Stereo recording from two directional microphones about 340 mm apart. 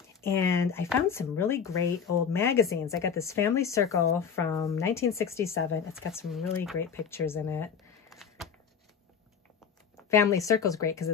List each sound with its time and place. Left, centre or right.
0.2 s speech: centre
5.5 s speech: left
5.9 s speech: centre
10.0 s speech: centre